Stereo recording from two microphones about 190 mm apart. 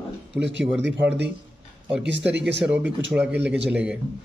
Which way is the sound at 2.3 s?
65° right (ahead or behind).